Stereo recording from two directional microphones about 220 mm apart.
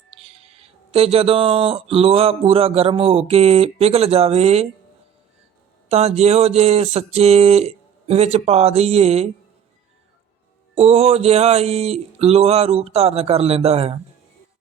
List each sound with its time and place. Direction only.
0.3 s speech: 25° right (ahead or behind)
5.9 s speech: 30° right (ahead or behind)
10.8 s speech: 25° right (ahead or behind)